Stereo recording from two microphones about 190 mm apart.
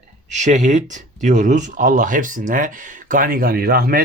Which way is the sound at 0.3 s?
40° right (ahead or behind).